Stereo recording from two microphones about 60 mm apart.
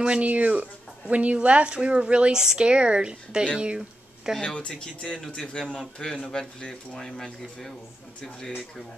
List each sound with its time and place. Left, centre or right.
0.0 s speech: right
4.4 s speech: centre
5.1 s a man's voice: centre